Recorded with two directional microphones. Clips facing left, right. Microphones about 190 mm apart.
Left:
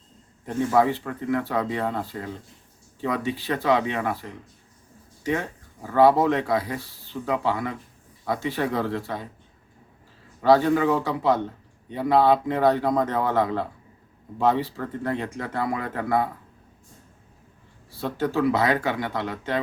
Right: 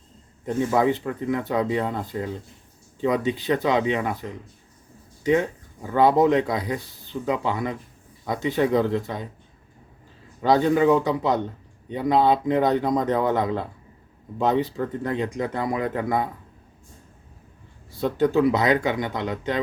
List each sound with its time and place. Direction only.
0.4 s speech: 20° right (ahead or behind)
10.4 s speech: 20° right (ahead or behind)
17.9 s speech: 20° right (ahead or behind)